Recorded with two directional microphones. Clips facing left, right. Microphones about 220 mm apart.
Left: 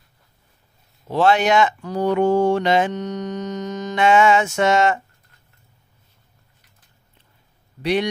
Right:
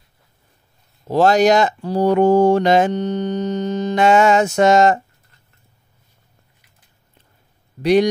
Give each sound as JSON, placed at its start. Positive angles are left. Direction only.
{"t": 1.0, "sound": "speech", "side_deg": -40}
{"t": 7.8, "sound": "speech", "side_deg": -40}